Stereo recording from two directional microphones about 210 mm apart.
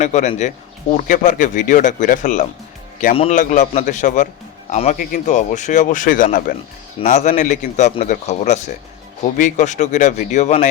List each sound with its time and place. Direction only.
0.0 s a man's voice: 35° left (ahead or behind)